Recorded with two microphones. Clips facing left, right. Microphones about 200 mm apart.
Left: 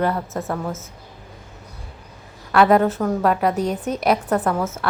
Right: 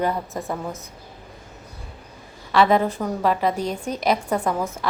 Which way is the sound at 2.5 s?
10° left (ahead or behind).